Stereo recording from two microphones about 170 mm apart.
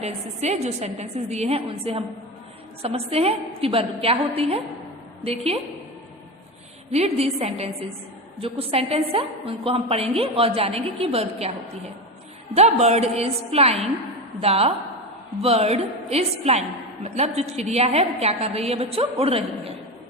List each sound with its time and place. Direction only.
0.0 s a woman's voice: 40° right (ahead or behind)
6.9 s a woman's voice: 40° right (ahead or behind)
12.5 s a woman's voice: 40° right (ahead or behind)